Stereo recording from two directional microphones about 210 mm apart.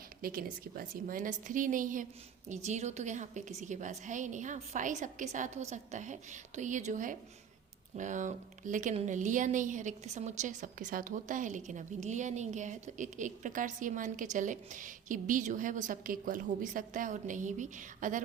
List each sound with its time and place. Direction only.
0.2 s speech: 45° right (ahead or behind)